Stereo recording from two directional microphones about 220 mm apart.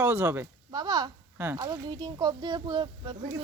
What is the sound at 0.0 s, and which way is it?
Speech, 10° right (ahead or behind).